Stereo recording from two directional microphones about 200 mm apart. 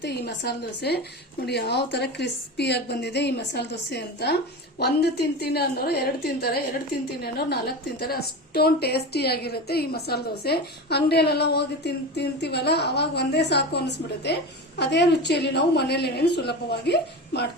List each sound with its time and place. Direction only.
0.0 s a woman's voice: 55° left (ahead or behind)